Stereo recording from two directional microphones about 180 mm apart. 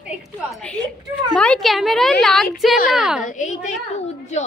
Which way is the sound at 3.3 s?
45° left (ahead or behind).